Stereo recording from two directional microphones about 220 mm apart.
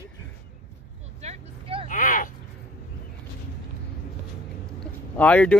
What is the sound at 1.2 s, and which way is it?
Vehicle, 25° right (ahead or behind).